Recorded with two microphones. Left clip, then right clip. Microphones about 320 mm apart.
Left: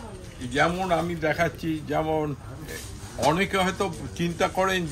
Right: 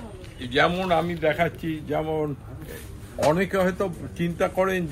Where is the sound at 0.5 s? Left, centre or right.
Centre.